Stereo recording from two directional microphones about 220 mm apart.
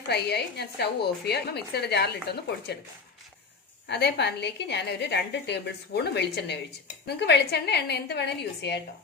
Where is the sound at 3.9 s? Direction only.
50° left (ahead or behind).